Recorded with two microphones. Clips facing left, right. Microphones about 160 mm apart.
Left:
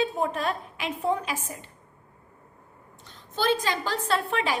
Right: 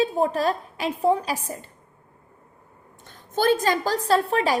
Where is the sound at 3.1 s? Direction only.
50° right (ahead or behind).